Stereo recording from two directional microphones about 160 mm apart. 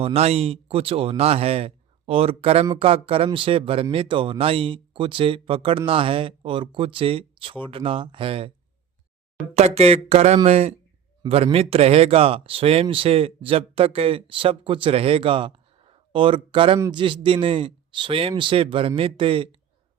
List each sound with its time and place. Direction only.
0.0 s speech: 40° right (ahead or behind)
9.6 s speech: 40° right (ahead or behind)